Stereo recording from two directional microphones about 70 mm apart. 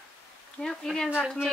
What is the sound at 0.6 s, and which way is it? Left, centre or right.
Speech, centre.